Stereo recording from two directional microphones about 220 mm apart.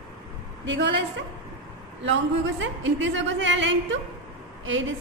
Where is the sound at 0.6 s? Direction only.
55° right (ahead or behind).